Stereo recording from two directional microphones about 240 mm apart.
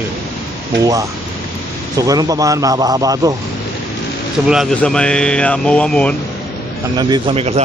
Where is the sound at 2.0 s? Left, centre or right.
Centre.